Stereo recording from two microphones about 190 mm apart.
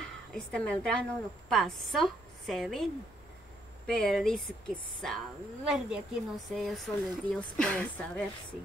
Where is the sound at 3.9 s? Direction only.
5° left (ahead or behind).